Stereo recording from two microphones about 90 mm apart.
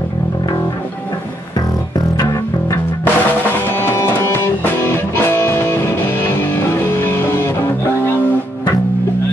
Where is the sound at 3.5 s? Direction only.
25° left (ahead or behind).